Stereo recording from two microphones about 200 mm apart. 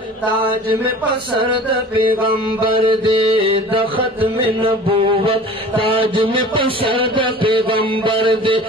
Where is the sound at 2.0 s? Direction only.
25° right (ahead or behind).